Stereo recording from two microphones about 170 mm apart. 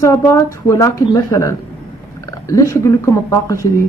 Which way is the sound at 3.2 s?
15° left (ahead or behind).